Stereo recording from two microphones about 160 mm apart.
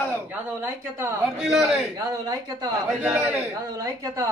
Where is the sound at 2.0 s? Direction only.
25° right (ahead or behind).